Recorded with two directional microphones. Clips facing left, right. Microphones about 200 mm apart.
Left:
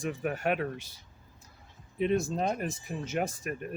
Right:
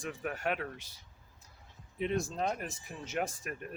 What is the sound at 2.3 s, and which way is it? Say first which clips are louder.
Speech: left 4 dB; 40° left (ahead or behind).